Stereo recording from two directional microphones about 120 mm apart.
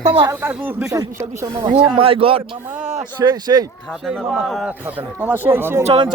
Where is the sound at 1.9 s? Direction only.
50° right (ahead or behind).